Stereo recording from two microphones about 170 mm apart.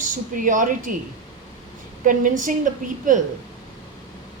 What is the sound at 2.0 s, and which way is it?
A woman's voice, 50° right (ahead or behind).